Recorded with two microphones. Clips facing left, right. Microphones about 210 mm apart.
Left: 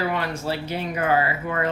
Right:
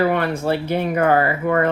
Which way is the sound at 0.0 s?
55° right (ahead or behind).